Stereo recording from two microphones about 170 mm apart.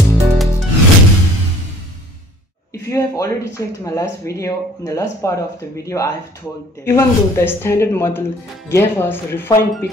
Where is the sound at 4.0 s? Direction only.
20° left (ahead or behind).